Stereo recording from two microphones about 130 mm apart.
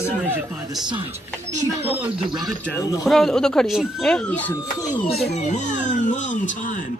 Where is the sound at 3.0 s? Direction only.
Centre (ahead or behind).